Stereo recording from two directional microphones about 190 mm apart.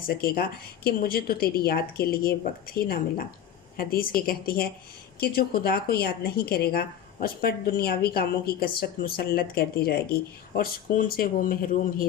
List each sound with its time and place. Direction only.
0.1 s speech: 55° left (ahead or behind)